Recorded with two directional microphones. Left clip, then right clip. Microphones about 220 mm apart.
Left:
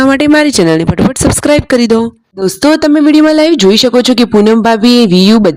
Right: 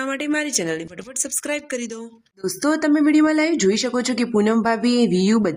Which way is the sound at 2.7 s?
35° left (ahead or behind).